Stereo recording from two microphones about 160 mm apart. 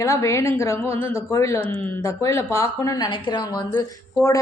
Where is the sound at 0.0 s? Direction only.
20° left (ahead or behind).